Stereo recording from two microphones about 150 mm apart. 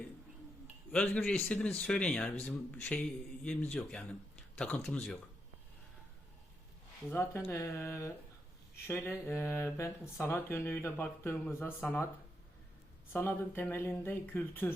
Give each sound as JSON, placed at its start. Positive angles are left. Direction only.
{"t": 1.0, "sound": "a man's voice", "side_deg": 5}
{"t": 7.1, "sound": "speech", "side_deg": 15}
{"t": 13.1, "sound": "speech", "side_deg": 15}